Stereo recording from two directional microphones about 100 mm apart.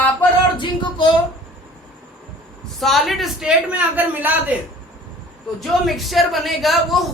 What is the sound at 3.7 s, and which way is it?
Speech, 15° right (ahead or behind).